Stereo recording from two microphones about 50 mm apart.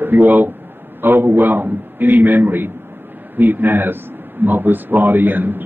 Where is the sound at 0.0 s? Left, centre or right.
Right.